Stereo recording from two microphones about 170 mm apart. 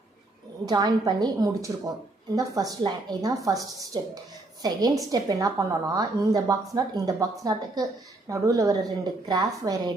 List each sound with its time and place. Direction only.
0.6 s a woman's voice: 20° right (ahead or behind)